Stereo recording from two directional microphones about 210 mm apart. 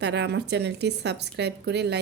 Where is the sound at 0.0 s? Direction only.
55° right (ahead or behind).